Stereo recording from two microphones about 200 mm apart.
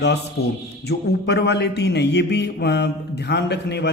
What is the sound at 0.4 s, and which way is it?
A man's voice, 55° left (ahead or behind).